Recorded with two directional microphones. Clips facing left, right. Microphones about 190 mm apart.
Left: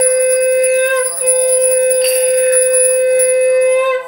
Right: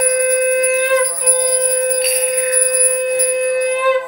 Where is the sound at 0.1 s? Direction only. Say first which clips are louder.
Left 4 dB; 35° left (ahead or behind).